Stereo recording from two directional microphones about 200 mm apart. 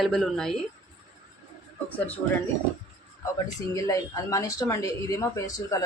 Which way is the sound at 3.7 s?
15° left (ahead or behind).